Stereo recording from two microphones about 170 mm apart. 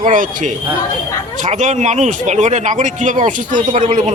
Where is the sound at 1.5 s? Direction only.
45° right (ahead or behind).